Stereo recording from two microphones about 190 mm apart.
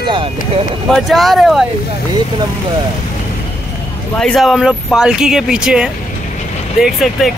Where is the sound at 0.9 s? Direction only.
Centre (ahead or behind).